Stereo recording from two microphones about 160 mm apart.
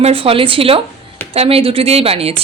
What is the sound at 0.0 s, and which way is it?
Speech, 35° right (ahead or behind).